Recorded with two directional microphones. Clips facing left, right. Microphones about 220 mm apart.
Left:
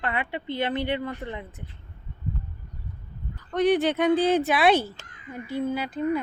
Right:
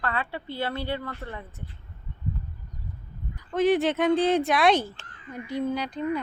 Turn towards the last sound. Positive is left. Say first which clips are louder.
# left 1 dB
turn(degrees=5)  # may be behind; listen again after turning